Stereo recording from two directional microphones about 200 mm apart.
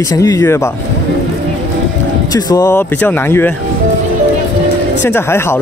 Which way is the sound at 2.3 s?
20° left (ahead or behind).